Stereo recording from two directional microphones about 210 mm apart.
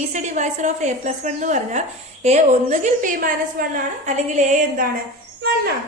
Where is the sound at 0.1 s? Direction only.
35° right (ahead or behind).